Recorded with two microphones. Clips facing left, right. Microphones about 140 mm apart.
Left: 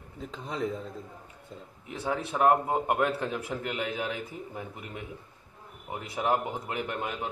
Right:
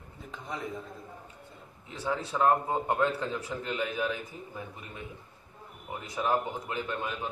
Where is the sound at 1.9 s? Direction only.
20° left (ahead or behind).